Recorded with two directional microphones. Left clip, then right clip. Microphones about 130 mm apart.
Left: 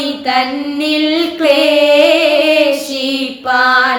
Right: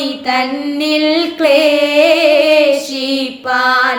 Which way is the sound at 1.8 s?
20° right (ahead or behind).